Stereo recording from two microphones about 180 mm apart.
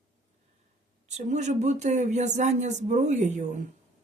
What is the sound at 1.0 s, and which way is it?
Speech, 40° right (ahead or behind).